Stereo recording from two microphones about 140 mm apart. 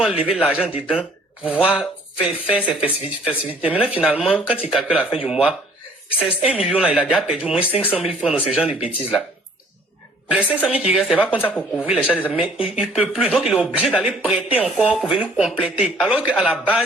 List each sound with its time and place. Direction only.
0.0 s speech: 10° right (ahead or behind)
10.3 s speech: 5° right (ahead or behind)
11.4 s a man's voice: 10° left (ahead or behind)
11.9 s speech: 5° right (ahead or behind)